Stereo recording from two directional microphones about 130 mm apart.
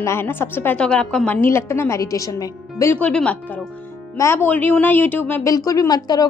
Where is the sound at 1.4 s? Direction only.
20° left (ahead or behind).